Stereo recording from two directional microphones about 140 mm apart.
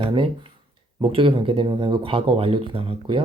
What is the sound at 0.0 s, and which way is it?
Speech, 40° right (ahead or behind).